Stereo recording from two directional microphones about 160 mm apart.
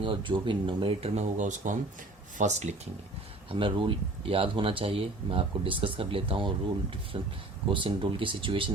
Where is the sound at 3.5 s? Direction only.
35° right (ahead or behind).